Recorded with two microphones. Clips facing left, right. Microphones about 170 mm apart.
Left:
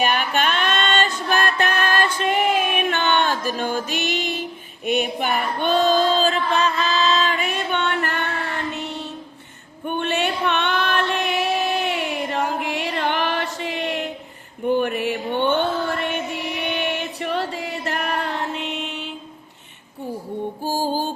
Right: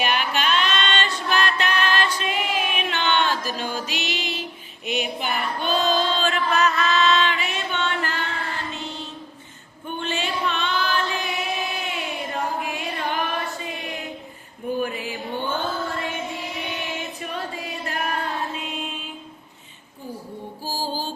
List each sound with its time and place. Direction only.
0.0 s music: 45° left (ahead or behind)
4.9 s female singing: 55° left (ahead or behind)
9.8 s female singing: 65° left (ahead or behind)
11.9 s a sound: 80° left
14.7 s mantra: 70° left (ahead or behind)
20.7 s music: 50° left (ahead or behind)